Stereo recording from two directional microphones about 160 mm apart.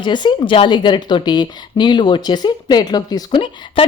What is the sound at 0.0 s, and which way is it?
A woman's voice, 30° left (ahead or behind).